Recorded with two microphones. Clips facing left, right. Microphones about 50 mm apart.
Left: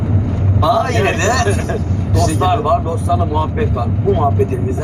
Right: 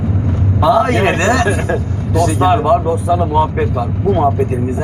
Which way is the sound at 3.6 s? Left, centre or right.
Centre.